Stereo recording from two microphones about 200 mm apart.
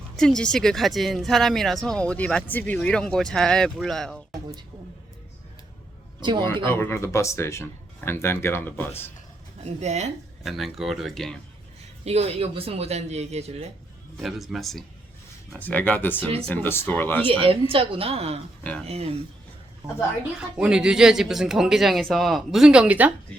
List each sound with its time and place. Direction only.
0.2 s speech: 5° left (ahead or behind)
6.7 s speech: 10° left (ahead or behind)
9.6 s speech: 35° right (ahead or behind)
10.4 s speech: centre (ahead or behind)
12.0 s speech: 30° right (ahead or behind)
14.2 s speech: centre (ahead or behind)
17.4 s speech: 25° right (ahead or behind)
20.6 s speech: 5° right (ahead or behind)